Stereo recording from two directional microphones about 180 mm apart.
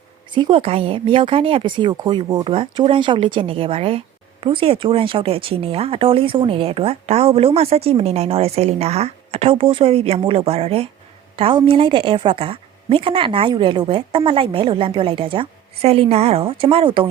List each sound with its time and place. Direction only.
0.3 s a woman's voice: 30° right (ahead or behind)